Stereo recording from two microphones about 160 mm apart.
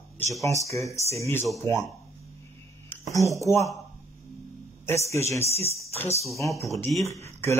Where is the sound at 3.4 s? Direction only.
20° left (ahead or behind).